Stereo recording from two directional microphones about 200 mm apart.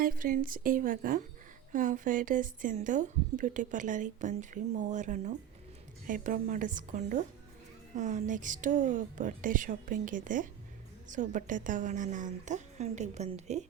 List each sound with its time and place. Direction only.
0.0 s a woman's voice: 45° right (ahead or behind)